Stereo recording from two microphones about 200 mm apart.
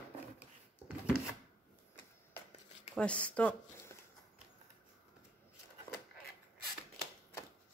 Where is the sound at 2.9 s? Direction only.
5° left (ahead or behind).